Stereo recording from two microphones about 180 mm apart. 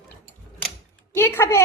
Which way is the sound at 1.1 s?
15° left (ahead or behind).